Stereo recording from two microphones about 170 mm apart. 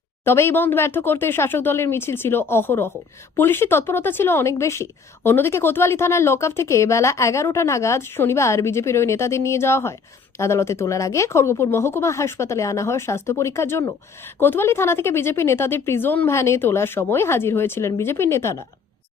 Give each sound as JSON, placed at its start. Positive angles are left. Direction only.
{"t": 0.3, "sound": "a woman's voice", "side_deg": 15}